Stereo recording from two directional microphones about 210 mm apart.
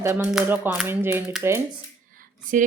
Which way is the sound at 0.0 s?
10° right (ahead or behind).